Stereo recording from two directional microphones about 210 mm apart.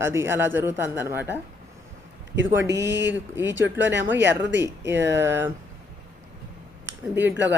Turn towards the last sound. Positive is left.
turn(degrees=-60)  # may be behind; listen again after turning